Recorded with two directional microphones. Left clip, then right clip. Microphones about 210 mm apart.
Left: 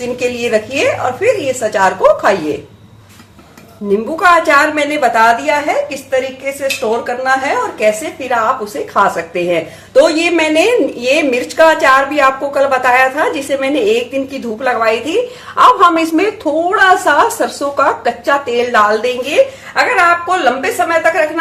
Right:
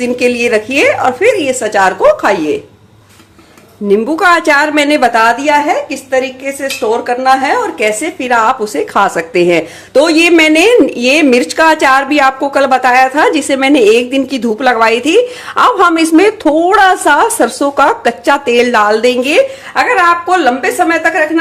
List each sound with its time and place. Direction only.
0.0 s a woman's voice: 40° right (ahead or behind)
4.2 s a woman's voice: 50° right (ahead or behind)